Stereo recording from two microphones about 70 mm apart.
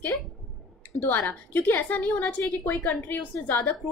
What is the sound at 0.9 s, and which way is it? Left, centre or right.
A woman's voice, left.